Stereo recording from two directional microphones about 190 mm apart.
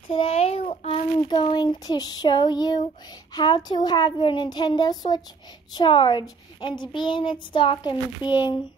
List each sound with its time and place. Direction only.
0.1 s a child's voice: 30° left (ahead or behind)